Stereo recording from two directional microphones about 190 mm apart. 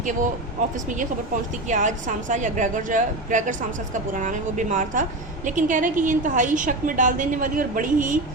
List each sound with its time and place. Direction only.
1.6 s a woman's voice: 40° right (ahead or behind)